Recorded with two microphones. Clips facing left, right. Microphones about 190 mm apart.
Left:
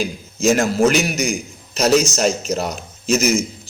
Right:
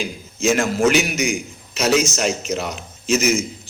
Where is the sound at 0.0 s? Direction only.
40° left (ahead or behind).